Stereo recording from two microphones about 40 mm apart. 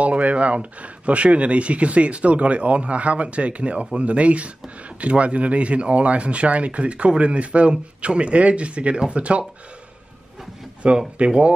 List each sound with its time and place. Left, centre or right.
0.0 s speech: right
10.8 s speech: right